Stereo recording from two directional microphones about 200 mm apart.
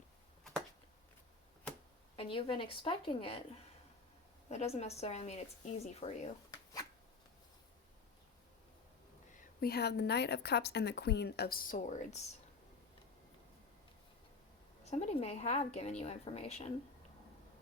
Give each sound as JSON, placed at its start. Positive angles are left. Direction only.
{"t": 2.1, "sound": "a woman's voice", "side_deg": 25}
{"t": 4.4, "sound": "a woman's voice", "side_deg": 30}
{"t": 9.4, "sound": "a woman's voice", "side_deg": 50}
{"t": 14.8, "sound": "a woman's voice", "side_deg": 35}